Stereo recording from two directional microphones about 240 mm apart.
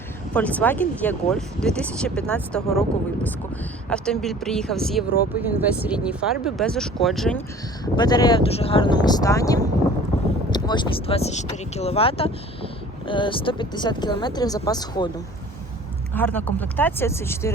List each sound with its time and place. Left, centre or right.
0.3 s speech: centre
3.8 s speech: centre
7.9 s speech: centre
16.1 s speech: centre